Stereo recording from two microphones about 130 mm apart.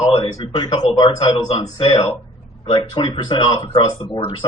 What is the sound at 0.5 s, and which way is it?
Speech, 30° left (ahead or behind).